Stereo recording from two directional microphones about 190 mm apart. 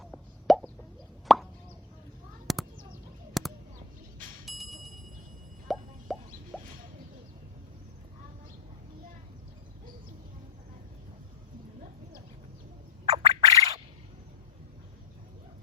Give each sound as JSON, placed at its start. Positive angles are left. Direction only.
{"t": 0.0, "sound": "plop", "side_deg": 0}
{"t": 2.5, "sound": "a sound", "side_deg": 0}
{"t": 4.4, "sound": "bicycle bell", "side_deg": 0}
{"t": 5.6, "sound": "plop", "side_deg": 0}
{"t": 6.5, "sound": "rodents", "side_deg": 5}
{"t": 13.1, "sound": "squawk", "side_deg": -35}
{"t": 13.4, "sound": "a sound", "side_deg": -20}